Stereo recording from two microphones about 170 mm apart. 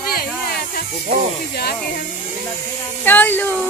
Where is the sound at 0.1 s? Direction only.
60° left (ahead or behind).